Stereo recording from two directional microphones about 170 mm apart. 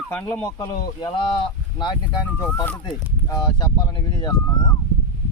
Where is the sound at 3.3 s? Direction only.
25° left (ahead or behind).